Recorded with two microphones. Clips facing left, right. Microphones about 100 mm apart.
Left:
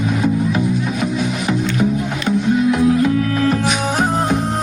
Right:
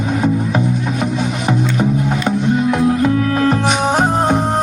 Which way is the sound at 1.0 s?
45° right (ahead or behind).